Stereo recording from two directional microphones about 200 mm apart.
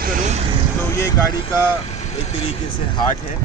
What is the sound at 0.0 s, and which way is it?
Vehicle, 40° right (ahead or behind).